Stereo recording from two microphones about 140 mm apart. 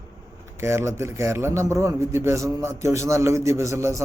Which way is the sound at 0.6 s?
20° right (ahead or behind).